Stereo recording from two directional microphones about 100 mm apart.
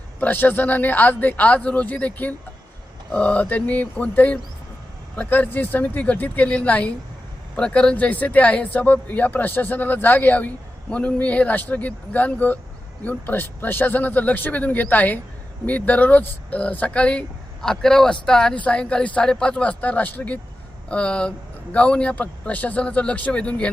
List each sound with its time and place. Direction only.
0.2 s speech: 20° left (ahead or behind)